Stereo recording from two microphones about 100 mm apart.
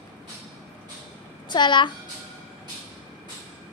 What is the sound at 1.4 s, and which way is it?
Speech, 50° left (ahead or behind).